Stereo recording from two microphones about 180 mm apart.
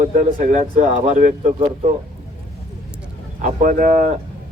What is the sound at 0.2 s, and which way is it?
A man's voice, 45° right (ahead or behind).